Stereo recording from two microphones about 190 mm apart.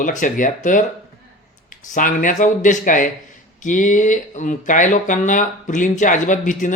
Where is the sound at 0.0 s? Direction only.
45° left (ahead or behind).